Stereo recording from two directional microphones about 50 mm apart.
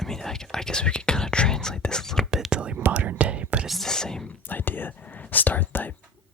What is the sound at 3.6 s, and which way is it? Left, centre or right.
Speech, centre.